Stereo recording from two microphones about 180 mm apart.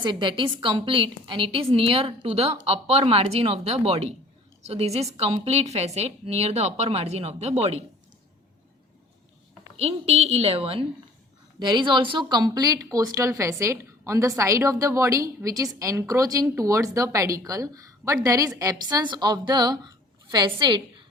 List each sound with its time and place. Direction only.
0.0 s a woman's voice: 25° right (ahead or behind)
9.7 s a woman's voice: 35° right (ahead or behind)